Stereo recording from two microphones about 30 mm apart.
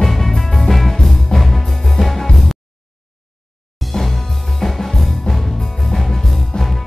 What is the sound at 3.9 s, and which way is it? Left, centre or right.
Music, centre.